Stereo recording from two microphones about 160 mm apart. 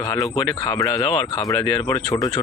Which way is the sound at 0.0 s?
20° left (ahead or behind).